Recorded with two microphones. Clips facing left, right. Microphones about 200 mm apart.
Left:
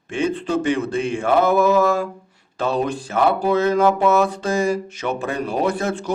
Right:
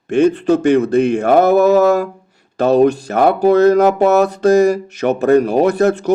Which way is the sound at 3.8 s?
40° right (ahead or behind).